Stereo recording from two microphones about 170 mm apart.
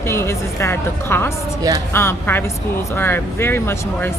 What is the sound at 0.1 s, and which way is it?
Speech, 15° left (ahead or behind).